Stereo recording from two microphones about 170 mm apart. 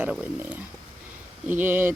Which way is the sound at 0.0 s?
10° right (ahead or behind).